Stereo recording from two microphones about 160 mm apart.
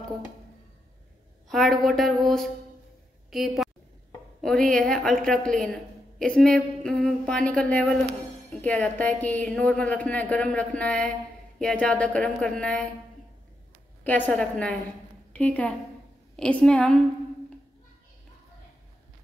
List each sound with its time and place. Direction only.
1.5 s a woman's voice: centre (ahead or behind)
14.0 s a woman's voice: 10° left (ahead or behind)